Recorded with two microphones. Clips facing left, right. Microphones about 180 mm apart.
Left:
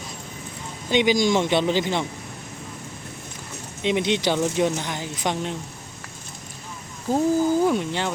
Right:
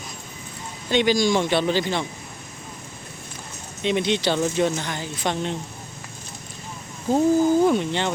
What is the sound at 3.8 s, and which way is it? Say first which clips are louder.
Speech: even; 15° left (ahead or behind).